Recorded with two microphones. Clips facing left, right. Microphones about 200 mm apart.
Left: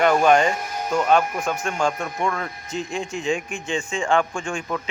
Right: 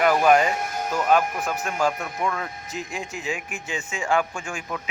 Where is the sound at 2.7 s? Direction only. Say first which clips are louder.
Left 7 dB; 5° right (ahead or behind).